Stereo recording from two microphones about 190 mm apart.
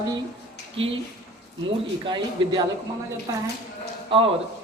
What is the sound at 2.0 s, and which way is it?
Speech, 25° right (ahead or behind).